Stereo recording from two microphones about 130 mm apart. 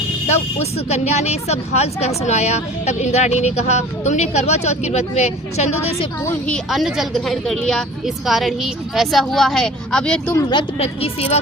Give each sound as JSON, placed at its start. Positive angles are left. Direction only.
{"t": 0.3, "sound": "speech", "side_deg": 55}
{"t": 6.4, "sound": "a woman's voice", "side_deg": 5}
{"t": 10.3, "sound": "speech", "side_deg": 35}
{"t": 10.8, "sound": "a woman's voice", "side_deg": 50}